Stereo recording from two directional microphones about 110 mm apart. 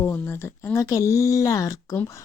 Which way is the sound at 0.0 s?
20° left (ahead or behind).